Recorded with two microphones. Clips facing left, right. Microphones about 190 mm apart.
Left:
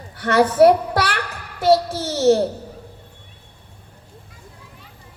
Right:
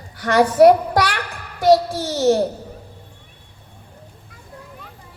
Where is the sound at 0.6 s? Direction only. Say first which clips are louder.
Right 3 dB; 25° left (ahead or behind).